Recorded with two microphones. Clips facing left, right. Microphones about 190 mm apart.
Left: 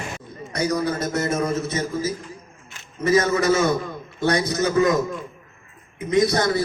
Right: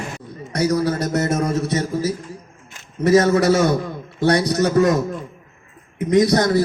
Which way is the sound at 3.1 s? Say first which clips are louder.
Right 4 dB; 65° right (ahead or behind).